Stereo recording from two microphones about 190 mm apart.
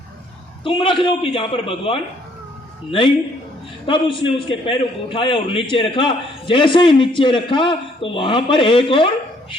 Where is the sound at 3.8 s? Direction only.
25° left (ahead or behind).